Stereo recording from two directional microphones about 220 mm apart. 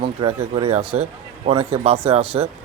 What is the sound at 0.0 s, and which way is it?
Speech, 25° right (ahead or behind).